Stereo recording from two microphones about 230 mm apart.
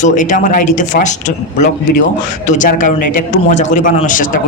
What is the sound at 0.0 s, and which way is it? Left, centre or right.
Speech, left.